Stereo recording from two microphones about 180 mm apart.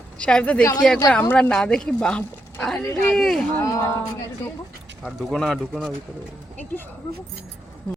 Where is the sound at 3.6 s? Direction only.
15° left (ahead or behind).